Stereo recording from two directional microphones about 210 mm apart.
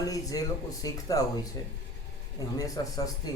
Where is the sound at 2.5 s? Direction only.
15° left (ahead or behind).